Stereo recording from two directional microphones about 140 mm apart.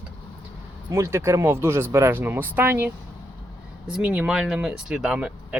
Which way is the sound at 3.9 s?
10° right (ahead or behind).